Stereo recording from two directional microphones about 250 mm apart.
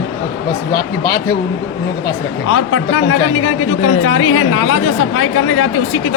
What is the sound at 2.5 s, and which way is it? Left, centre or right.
Speech, left.